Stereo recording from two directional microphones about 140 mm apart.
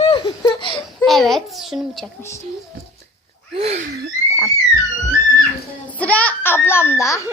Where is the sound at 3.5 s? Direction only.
45° right (ahead or behind).